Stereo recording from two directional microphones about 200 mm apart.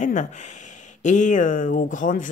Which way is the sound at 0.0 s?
40° left (ahead or behind).